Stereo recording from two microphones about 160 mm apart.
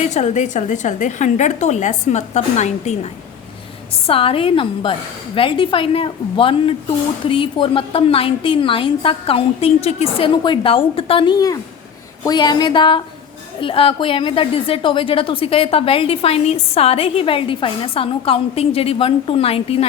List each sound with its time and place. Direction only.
0.1 s a woman's voice: 50° left (ahead or behind)